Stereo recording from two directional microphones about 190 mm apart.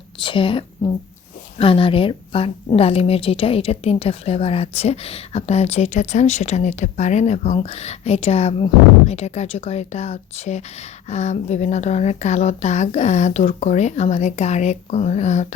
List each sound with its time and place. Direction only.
0.2 s a woman's voice: 25° left (ahead or behind)